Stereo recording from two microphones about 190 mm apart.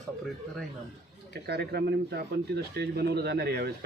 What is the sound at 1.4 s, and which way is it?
Speech, 60° right (ahead or behind).